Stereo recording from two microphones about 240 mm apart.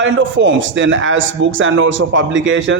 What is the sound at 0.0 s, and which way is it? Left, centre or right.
A man's voice, right.